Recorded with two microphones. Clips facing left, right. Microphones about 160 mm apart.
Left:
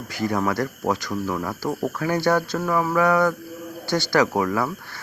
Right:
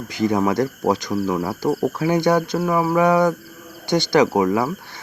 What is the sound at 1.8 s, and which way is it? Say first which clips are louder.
Speech: right 2 dB; 20° right (ahead or behind).